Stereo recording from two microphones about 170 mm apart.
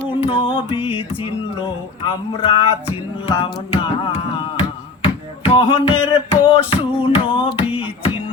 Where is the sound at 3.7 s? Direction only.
35° left (ahead or behind).